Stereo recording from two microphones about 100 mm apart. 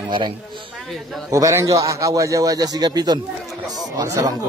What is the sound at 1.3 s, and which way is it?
A man's voice, 30° right (ahead or behind).